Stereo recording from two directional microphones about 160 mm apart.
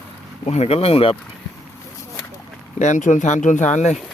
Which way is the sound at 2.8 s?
50° left (ahead or behind).